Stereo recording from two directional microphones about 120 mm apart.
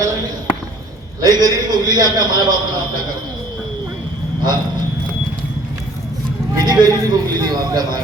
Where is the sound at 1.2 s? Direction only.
35° right (ahead or behind).